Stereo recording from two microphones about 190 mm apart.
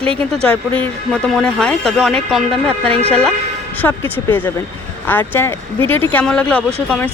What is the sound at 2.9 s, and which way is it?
Speech, 35° right (ahead or behind).